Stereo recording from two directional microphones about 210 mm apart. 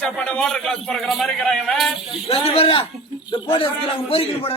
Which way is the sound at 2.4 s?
30° left (ahead or behind).